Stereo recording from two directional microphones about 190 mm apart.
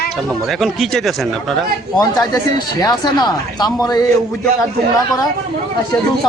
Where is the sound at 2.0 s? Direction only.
20° left (ahead or behind).